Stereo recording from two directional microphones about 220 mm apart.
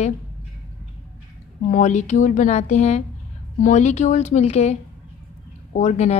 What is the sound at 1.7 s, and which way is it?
A woman's voice, 35° left (ahead or behind).